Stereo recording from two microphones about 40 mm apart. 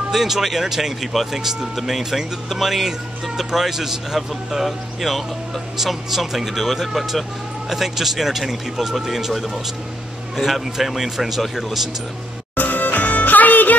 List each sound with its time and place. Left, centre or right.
0.1 s speech: centre
12.5 s music: left